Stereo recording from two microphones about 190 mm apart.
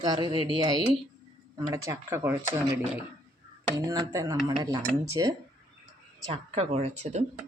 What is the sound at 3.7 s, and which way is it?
Speech, 20° right (ahead or behind).